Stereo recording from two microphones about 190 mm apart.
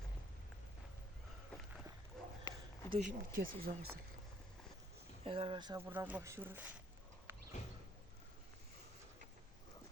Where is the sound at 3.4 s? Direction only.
50° right (ahead or behind).